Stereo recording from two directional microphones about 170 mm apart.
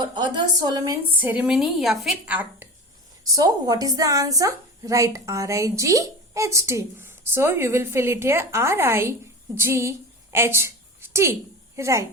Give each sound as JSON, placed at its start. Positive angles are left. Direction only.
{"t": 0.0, "sound": "a woman's voice", "side_deg": -25}
{"t": 1.2, "sound": "a woman's voice", "side_deg": -10}
{"t": 3.3, "sound": "a woman's voice", "side_deg": -20}
{"t": 10.3, "sound": "a sound", "side_deg": -15}
{"t": 11.8, "sound": "a woman's voice", "side_deg": -15}